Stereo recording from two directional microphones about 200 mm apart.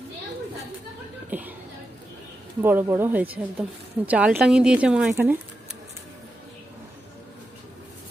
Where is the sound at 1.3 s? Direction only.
10° right (ahead or behind).